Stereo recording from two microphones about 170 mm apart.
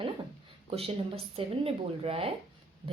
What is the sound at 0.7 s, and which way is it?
A woman's voice, 35° right (ahead or behind).